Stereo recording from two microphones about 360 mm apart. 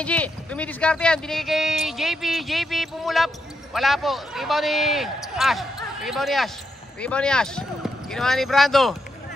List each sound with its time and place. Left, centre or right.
0.0 s speech: centre